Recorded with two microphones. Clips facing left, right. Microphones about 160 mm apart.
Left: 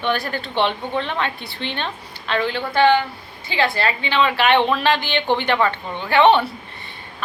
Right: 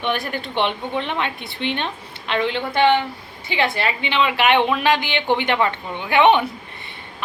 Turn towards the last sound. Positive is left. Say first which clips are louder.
# left 1 dB
turn(degrees=-15)  # may be behind; listen again after turning